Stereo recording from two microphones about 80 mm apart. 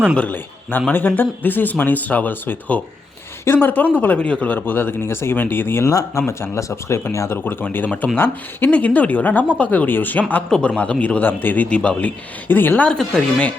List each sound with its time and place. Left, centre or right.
0.2 s a man's voice: left
5.9 s speech: left
6.2 s a man's voice: left
12.9 s a man's voice: centre